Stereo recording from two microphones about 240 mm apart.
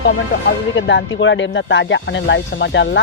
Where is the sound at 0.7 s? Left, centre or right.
Left.